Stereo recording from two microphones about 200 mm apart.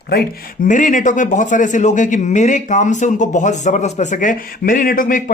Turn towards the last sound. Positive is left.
turn(degrees=45)  # may be behind; listen again after turning